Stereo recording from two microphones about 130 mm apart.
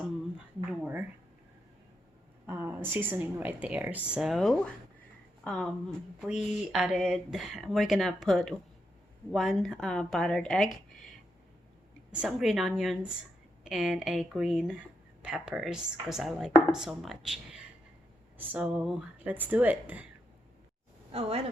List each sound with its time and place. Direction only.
0.3 s a sound: 10° right (ahead or behind)
2.5 s speech: 15° right (ahead or behind)
21.1 s speech: 50° right (ahead or behind)